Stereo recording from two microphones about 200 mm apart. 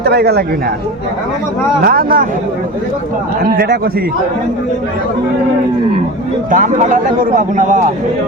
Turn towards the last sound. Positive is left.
turn(degrees=-40)  # may be behind; listen again after turning